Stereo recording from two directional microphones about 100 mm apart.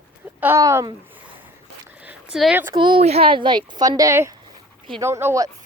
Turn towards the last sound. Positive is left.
turn(degrees=-25)  # may be behind; listen again after turning